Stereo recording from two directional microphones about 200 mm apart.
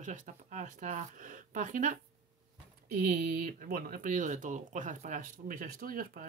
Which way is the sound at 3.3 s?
45° right (ahead or behind).